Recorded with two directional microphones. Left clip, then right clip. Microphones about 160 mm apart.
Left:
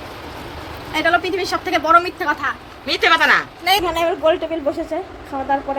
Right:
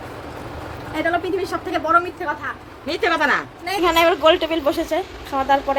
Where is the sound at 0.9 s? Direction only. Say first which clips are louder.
Left 4 dB; 10° right (ahead or behind).